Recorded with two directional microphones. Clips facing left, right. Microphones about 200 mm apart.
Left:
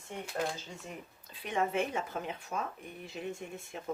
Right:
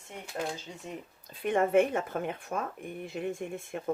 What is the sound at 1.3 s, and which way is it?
Speech, 50° right (ahead or behind).